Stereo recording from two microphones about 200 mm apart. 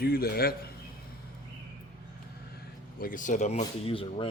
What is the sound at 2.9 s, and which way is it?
Speech, 45° left (ahead or behind).